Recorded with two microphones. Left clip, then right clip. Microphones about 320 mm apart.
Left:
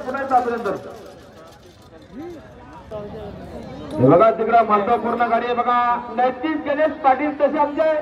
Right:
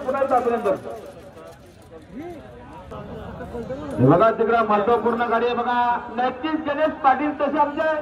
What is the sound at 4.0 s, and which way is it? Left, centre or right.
A man's voice, left.